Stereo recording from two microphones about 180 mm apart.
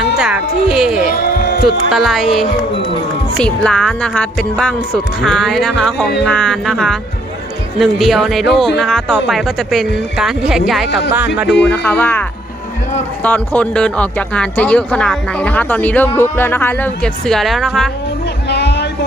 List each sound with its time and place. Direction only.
0.2 s speech: 5° right (ahead or behind)
1.1 s a sound: 55° left (ahead or behind)
1.6 s speech: centre (ahead or behind)
11.4 s speech: 80° left
11.7 s speech: 5° left (ahead or behind)
13.2 s speech: 10° left (ahead or behind)
18.4 s a sound: 70° left (ahead or behind)